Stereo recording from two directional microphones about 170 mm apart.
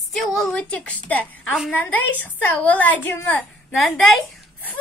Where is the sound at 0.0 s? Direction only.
Centre (ahead or behind).